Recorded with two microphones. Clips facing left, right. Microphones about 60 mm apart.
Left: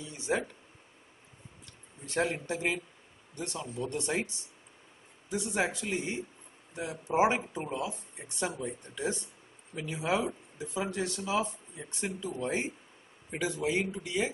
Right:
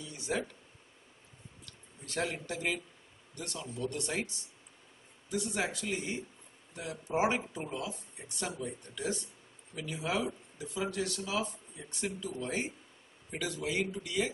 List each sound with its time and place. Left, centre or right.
0.0 s a sound: left
1.7 s speech: left
5.3 s speech: left